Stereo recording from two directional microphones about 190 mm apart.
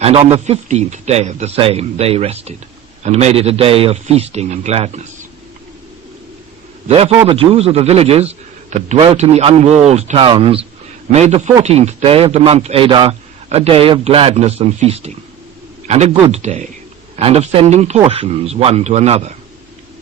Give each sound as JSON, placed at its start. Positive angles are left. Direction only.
{"t": 0.0, "sound": "a man's voice", "side_deg": -30}
{"t": 6.8, "sound": "a man's voice", "side_deg": -30}